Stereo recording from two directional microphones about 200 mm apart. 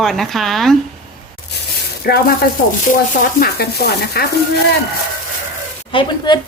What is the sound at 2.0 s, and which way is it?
Speech, 50° left (ahead or behind).